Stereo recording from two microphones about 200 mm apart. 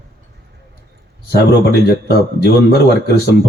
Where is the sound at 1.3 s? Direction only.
55° left (ahead or behind).